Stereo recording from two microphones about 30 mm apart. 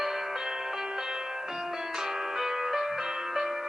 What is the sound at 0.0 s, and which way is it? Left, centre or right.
Music, centre.